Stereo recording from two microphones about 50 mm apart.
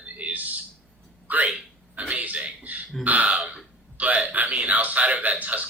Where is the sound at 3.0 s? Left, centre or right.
Right.